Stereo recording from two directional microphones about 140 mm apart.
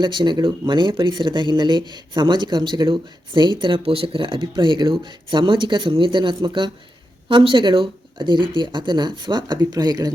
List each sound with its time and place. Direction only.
0.0 s speech: 35° right (ahead or behind)